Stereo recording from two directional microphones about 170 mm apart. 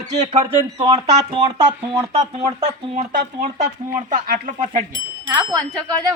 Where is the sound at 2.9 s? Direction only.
45° right (ahead or behind).